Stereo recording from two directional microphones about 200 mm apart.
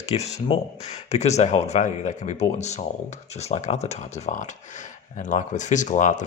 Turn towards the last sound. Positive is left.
turn(degrees=40)  # may be behind; listen again after turning